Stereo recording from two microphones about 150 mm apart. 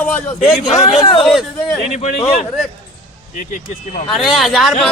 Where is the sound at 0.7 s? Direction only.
50° left (ahead or behind).